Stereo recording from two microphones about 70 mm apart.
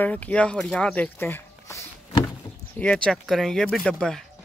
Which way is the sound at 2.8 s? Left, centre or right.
Centre.